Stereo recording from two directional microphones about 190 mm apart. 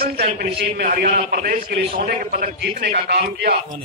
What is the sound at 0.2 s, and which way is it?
Speech, 35° right (ahead or behind).